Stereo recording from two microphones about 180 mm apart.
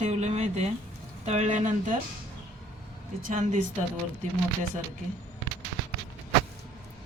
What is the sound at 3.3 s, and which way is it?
Speech, 45° right (ahead or behind).